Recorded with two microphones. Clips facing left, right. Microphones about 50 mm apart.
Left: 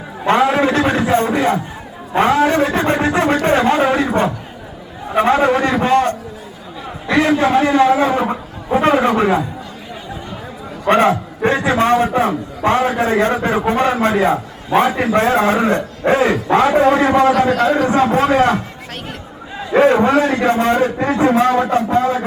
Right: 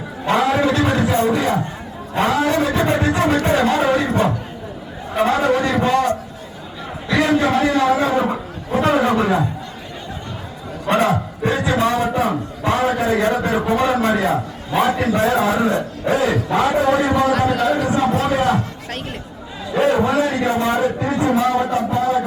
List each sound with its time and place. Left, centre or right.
0.3 s a sound: left
2.1 s a man's voice: left
10.8 s a man's voice: left
17.0 s a man's voice: left
18.1 s speech: left
19.8 s a man's voice: left